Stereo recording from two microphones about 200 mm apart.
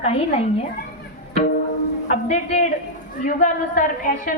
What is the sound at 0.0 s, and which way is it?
Speech, 30° left (ahead or behind).